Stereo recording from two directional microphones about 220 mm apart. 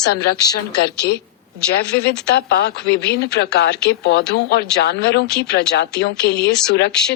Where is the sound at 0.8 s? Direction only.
45° left (ahead or behind).